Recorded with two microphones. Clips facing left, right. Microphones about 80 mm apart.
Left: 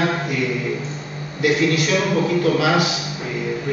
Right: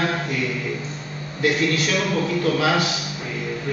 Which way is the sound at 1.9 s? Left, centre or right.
Centre.